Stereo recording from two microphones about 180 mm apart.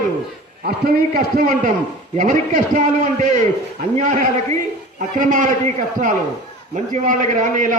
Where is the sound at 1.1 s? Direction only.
50° right (ahead or behind).